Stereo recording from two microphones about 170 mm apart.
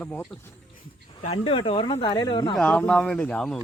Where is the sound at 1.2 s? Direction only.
35° left (ahead or behind).